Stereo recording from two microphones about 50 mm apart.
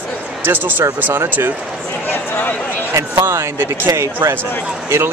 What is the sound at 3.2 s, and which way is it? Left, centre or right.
Speech, right.